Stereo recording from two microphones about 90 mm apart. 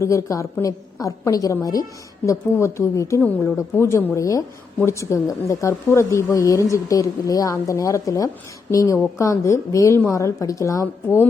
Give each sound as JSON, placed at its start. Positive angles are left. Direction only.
{"t": 0.0, "sound": "speech", "side_deg": 35}